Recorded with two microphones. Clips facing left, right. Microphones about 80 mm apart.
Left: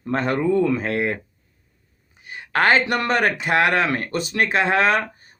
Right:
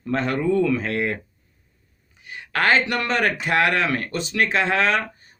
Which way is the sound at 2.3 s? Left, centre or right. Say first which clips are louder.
Left 2 dB; left.